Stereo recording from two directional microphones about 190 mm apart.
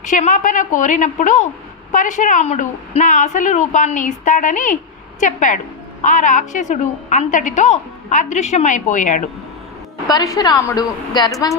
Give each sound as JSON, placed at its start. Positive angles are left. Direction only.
{"t": 0.0, "sound": "a woman's voice", "side_deg": 40}
{"t": 10.1, "sound": "a woman's voice", "side_deg": 20}